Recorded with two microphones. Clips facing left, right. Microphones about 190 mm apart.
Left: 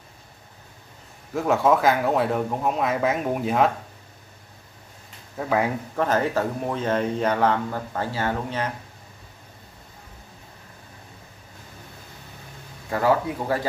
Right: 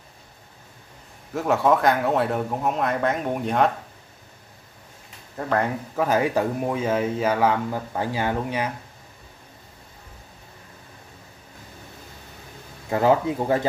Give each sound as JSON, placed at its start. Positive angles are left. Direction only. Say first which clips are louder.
{"t": 1.3, "sound": "speech", "louder": "even", "side_deg": 0}
{"t": 5.4, "sound": "speech", "louder": "left 1 dB", "side_deg": 5}
{"t": 5.9, "sound": "speech", "louder": "right 2 dB", "side_deg": -10}
{"t": 12.9, "sound": "speech", "louder": "right 2 dB", "side_deg": -20}